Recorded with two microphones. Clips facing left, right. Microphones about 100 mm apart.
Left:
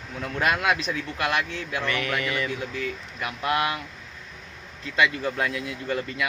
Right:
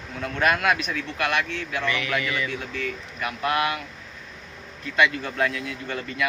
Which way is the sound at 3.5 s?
25° left (ahead or behind).